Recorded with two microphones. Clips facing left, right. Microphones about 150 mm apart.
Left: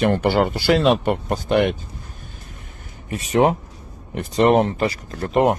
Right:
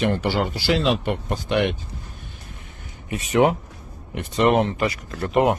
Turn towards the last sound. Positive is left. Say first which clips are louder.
# left 2 dB
turn(degrees=35)  # may be behind; listen again after turning